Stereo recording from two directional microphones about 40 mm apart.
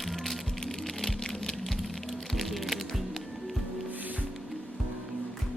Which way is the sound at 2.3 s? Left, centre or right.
Centre.